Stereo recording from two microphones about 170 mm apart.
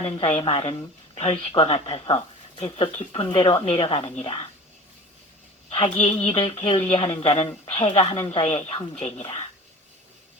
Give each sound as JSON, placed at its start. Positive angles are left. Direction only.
{"t": 0.0, "sound": "a woman's voice", "side_deg": 35}
{"t": 5.7, "sound": "a woman's voice", "side_deg": 35}